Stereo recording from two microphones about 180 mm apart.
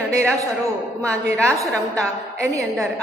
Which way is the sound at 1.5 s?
15° right (ahead or behind).